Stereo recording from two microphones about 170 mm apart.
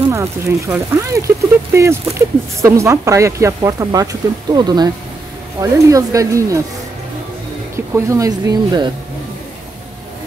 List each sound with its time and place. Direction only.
0.1 s speech: 15° right (ahead or behind)
7.7 s speech: 15° right (ahead or behind)